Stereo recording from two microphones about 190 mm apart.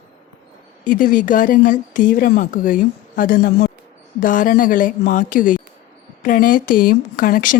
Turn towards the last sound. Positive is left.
turn(degrees=45)  # may be behind; listen again after turning